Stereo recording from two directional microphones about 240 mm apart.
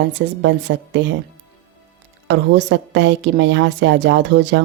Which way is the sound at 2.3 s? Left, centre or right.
Right.